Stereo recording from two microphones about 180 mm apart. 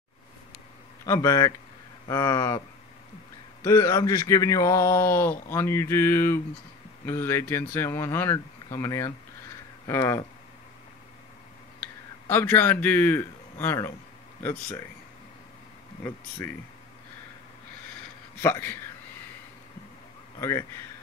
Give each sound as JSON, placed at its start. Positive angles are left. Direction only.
{"t": 1.0, "sound": "speech", "side_deg": 15}
{"t": 3.6, "sound": "speech", "side_deg": 15}
{"t": 11.8, "sound": "speech", "side_deg": 10}
{"t": 18.4, "sound": "speech", "side_deg": 10}
{"t": 20.3, "sound": "speech", "side_deg": 15}